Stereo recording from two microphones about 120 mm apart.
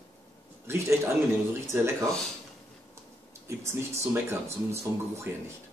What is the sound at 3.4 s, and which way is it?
Speech, 20° right (ahead or behind).